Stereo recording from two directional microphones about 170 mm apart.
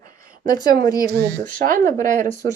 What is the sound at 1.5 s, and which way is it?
Speech, 50° right (ahead or behind).